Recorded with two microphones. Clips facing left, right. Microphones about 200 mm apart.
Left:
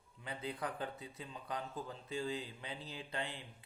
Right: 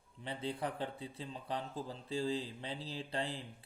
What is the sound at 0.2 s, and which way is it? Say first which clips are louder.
Speech: right 3 dB; 30° right (ahead or behind).